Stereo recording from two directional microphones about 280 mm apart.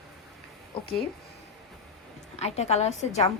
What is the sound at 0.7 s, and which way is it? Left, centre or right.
Speech, centre.